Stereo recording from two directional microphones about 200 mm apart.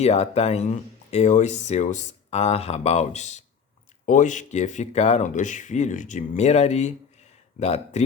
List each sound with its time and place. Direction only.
0.0 s speech: 30° left (ahead or behind)